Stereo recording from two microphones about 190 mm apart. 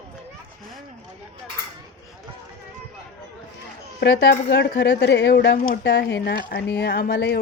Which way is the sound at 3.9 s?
60° left (ahead or behind).